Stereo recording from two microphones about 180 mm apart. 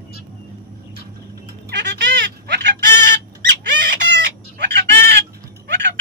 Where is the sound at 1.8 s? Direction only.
75° right (ahead or behind).